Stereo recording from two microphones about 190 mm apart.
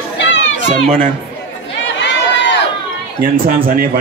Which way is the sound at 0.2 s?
75° left (ahead or behind).